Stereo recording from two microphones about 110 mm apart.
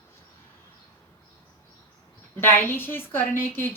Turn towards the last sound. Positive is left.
turn(degrees=20)  # may be behind; listen again after turning